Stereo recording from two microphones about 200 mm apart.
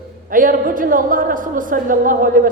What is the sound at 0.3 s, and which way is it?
A woman's voice, 45° right (ahead or behind).